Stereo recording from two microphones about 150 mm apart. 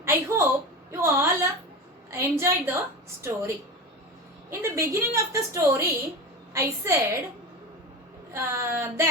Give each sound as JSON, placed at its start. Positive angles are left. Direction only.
{"t": 0.0, "sound": "a sound", "side_deg": -15}
{"t": 2.0, "sound": "a woman's voice", "side_deg": -20}
{"t": 4.7, "sound": "a woman's voice", "side_deg": -20}
{"t": 8.3, "sound": "a woman's voice", "side_deg": -20}